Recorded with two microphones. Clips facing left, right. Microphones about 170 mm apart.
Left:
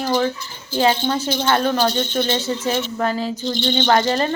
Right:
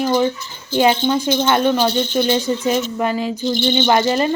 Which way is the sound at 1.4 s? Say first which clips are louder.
Even; 10° right (ahead or behind).